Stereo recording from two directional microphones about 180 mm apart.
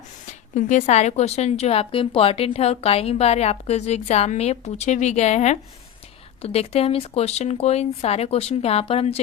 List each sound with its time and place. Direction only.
0.3 s a woman's voice: 40° left (ahead or behind)